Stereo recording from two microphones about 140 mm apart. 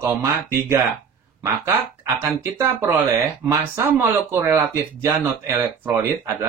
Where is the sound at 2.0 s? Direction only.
15° right (ahead or behind).